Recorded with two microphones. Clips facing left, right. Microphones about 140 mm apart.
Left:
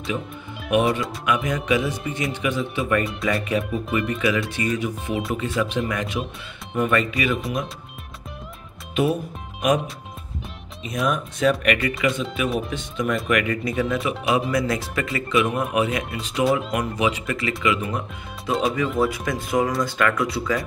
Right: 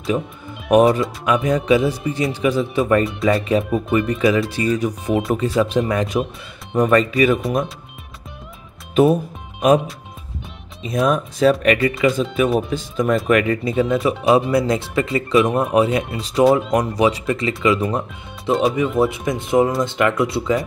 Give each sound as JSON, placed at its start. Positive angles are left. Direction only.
{"t": 0.7, "sound": "speech", "side_deg": -40}
{"t": 8.9, "sound": "speech", "side_deg": -35}
{"t": 10.8, "sound": "speech", "side_deg": -35}